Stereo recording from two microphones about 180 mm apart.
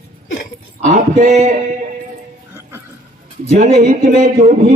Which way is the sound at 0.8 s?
40° right (ahead or behind).